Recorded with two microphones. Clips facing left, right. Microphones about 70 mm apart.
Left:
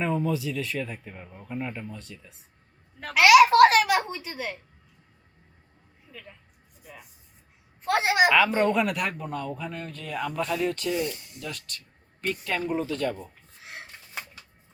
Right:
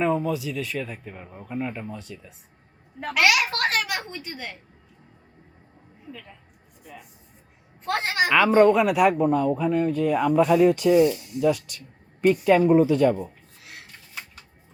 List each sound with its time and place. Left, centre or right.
0.0 s a child's voice: centre
6.1 s a child's voice: centre
8.5 s a child's voice: centre
13.6 s a sound: left